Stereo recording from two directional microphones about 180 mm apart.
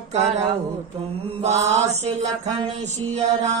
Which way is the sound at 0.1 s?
40° right (ahead or behind).